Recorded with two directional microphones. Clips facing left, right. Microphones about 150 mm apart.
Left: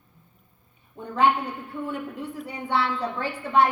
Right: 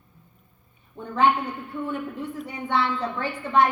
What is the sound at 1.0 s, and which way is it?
Speech, 5° left (ahead or behind).